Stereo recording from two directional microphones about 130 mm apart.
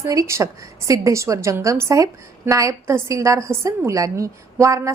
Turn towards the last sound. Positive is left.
turn(degrees=-25)  # may be behind; listen again after turning